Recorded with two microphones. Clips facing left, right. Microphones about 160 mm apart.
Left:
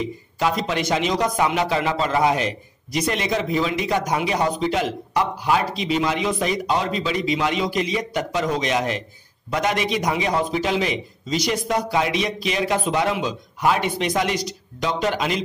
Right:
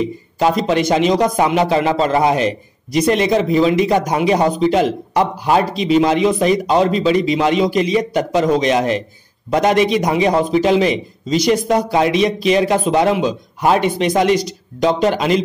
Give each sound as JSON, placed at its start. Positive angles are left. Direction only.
{"t": 0.4, "sound": "a man's voice", "side_deg": -30}